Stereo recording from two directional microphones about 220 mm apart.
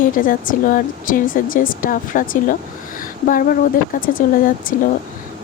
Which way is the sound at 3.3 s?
40° left (ahead or behind).